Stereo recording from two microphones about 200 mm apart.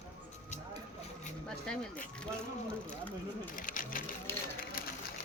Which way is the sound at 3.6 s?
40° left (ahead or behind).